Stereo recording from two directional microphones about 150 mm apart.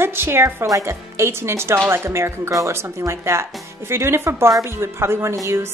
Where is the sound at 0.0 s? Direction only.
15° right (ahead or behind).